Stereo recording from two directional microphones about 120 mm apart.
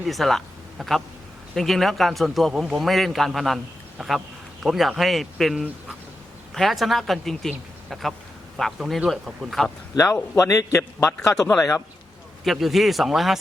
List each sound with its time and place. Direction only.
0.0 s a man's voice: centre (ahead or behind)
8.5 s a man's voice: centre (ahead or behind)
9.9 s a man's voice: 30° left (ahead or behind)
12.5 s a man's voice: centre (ahead or behind)